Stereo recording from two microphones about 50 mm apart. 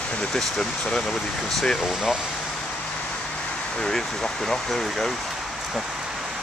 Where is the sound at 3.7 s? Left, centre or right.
Centre.